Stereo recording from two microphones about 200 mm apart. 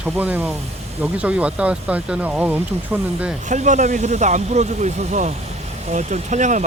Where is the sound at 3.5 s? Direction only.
40° right (ahead or behind).